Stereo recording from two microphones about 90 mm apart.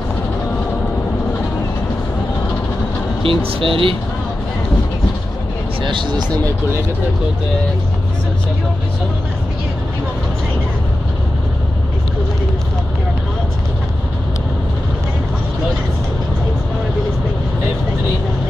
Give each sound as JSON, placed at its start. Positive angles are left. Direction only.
{"t": 3.2, "sound": "speech", "side_deg": -85}
{"t": 5.8, "sound": "speech", "side_deg": -65}